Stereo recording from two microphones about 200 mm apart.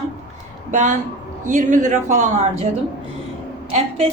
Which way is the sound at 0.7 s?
40° right (ahead or behind).